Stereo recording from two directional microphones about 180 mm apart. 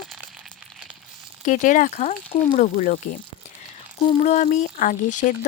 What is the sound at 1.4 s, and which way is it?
Speech, 45° left (ahead or behind).